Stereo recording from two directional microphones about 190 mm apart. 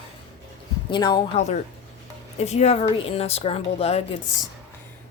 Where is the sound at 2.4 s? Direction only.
35° left (ahead or behind).